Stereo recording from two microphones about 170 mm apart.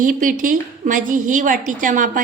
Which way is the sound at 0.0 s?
50° right (ahead or behind).